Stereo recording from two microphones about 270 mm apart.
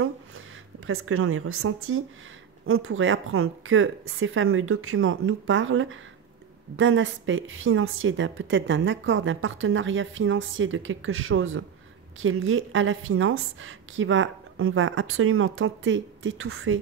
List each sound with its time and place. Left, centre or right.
0.7 s a woman's voice: right